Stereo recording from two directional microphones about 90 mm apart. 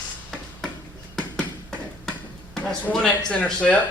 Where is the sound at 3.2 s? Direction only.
15° left (ahead or behind).